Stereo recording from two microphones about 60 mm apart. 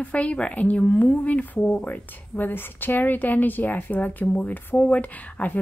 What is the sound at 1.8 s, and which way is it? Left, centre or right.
A woman's voice, left.